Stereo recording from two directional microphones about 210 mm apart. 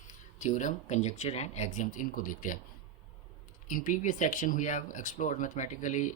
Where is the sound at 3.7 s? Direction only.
40° left (ahead or behind).